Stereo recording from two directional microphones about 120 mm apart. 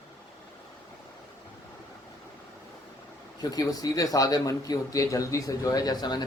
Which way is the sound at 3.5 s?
30° left (ahead or behind).